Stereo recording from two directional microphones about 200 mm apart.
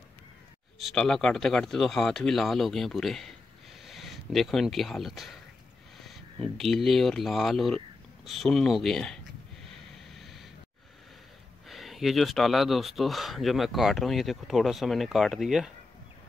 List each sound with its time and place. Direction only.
0.7 s speech: centre (ahead or behind)
5.9 s a sound: centre (ahead or behind)
6.5 s speech: centre (ahead or behind)
9.7 s snort: centre (ahead or behind)
11.7 s speech: centre (ahead or behind)